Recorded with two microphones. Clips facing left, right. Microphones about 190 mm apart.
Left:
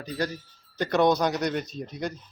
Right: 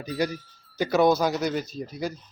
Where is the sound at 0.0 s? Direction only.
10° right (ahead or behind).